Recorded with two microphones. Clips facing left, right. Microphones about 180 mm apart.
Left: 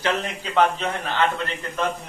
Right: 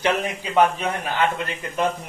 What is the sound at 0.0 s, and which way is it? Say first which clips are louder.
A man's voice: right 2 dB; 10° right (ahead or behind).